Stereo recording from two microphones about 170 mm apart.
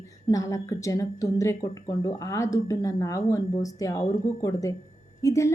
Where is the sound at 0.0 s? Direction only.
20° left (ahead or behind).